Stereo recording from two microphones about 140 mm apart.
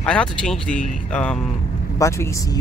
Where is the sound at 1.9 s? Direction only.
20° left (ahead or behind).